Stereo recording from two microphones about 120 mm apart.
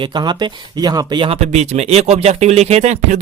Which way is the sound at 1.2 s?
65° right (ahead or behind).